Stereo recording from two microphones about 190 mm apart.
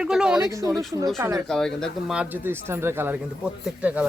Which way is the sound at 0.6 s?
15° right (ahead or behind).